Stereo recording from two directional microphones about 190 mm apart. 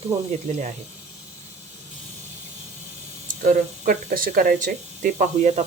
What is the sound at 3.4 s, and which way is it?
Speech, 40° right (ahead or behind).